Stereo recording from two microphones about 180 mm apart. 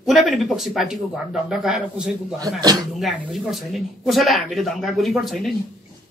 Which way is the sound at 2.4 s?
20° right (ahead or behind).